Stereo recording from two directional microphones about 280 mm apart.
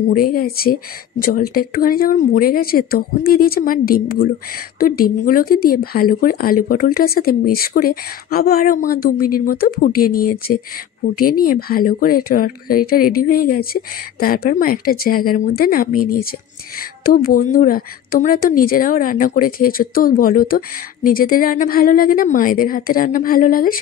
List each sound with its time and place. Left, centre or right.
0.1 s speech: left
17.1 s speech: left